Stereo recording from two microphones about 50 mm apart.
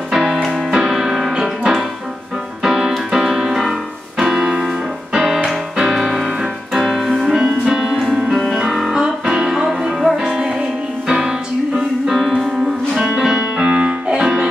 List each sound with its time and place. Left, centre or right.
0.1 s music: centre
0.7 s music: centre
1.3 s music: centre
8.6 s music: centre
8.9 s music: centre